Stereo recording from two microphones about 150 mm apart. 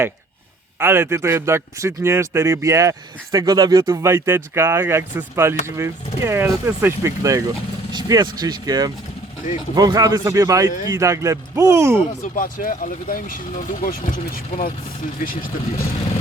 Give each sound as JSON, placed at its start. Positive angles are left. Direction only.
{"t": 0.8, "sound": "speech", "side_deg": -15}
{"t": 12.2, "sound": "speech", "side_deg": 65}